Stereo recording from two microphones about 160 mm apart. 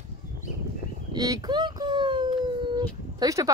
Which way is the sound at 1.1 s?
25° right (ahead or behind).